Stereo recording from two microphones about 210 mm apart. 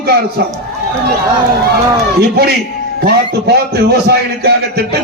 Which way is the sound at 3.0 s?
50° right (ahead or behind).